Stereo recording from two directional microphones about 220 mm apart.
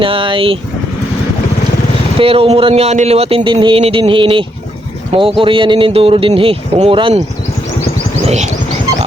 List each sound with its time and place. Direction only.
0.0 s a man's voice: 25° right (ahead or behind)
2.1 s a man's voice: 25° right (ahead or behind)